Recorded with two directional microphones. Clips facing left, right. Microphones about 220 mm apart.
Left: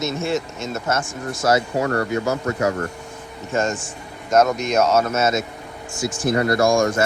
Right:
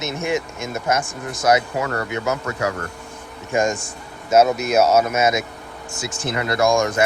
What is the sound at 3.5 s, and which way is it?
Speech, 10° right (ahead or behind).